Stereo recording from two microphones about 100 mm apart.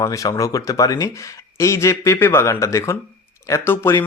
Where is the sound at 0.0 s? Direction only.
35° left (ahead or behind).